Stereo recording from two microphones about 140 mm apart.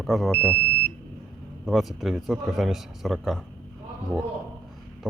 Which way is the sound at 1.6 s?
Centre (ahead or behind).